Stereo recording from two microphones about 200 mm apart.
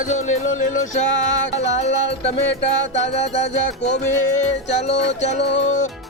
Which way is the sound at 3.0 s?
35° left (ahead or behind).